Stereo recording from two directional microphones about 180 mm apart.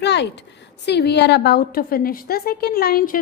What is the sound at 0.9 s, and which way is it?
A woman's voice, 70° left (ahead or behind).